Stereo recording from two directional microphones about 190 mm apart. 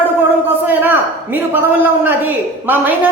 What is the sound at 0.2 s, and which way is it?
A man's voice, 10° right (ahead or behind).